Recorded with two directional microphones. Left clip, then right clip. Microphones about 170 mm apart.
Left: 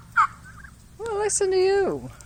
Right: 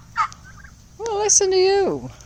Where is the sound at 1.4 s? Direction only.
35° right (ahead or behind).